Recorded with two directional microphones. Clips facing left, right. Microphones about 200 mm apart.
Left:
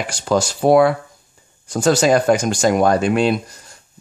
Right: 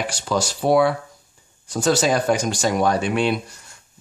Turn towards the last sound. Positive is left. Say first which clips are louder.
# left 4 dB
turn(degrees=40)  # may be behind; listen again after turning